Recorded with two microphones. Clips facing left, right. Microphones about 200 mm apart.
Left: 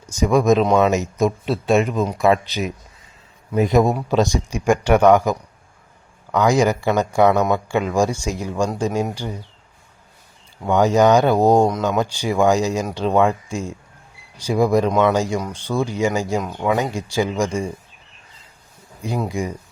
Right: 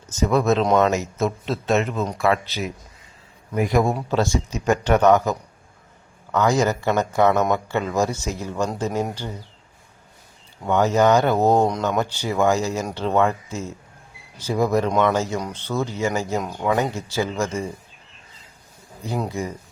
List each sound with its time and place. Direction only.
0.0 s a man's voice: 10° left (ahead or behind)
10.7 s speech: 15° left (ahead or behind)
19.3 s speech: 15° left (ahead or behind)